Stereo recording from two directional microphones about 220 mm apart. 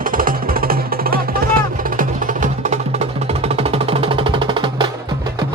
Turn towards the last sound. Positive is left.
turn(degrees=-20)  # may be behind; listen again after turning